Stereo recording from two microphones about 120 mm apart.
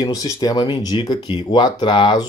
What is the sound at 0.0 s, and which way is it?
Speech, 30° left (ahead or behind).